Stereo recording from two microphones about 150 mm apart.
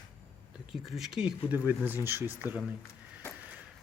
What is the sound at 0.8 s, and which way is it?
Speech, centre (ahead or behind).